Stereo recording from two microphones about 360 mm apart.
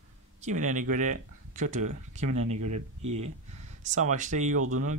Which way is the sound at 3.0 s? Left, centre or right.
Centre.